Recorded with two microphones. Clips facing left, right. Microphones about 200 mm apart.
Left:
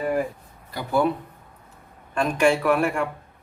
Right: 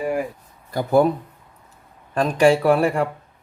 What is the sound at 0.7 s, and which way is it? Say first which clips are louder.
Speech: right 5 dB; 45° right (ahead or behind).